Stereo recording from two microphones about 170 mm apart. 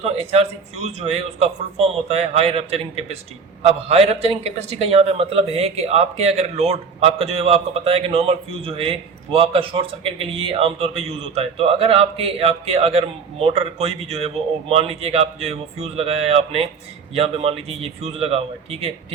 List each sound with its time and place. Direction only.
0.0 s speech: 40° right (ahead or behind)